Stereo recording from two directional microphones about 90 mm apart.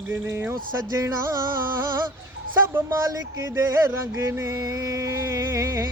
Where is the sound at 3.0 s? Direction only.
35° right (ahead or behind).